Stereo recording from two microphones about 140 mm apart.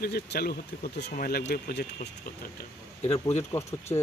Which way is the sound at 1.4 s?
55° left (ahead or behind).